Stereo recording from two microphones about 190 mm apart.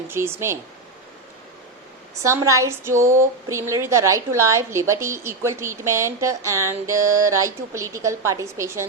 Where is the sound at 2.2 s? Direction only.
15° right (ahead or behind).